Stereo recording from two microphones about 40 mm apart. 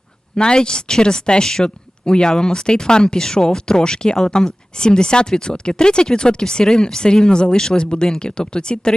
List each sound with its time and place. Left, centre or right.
0.3 s speech: left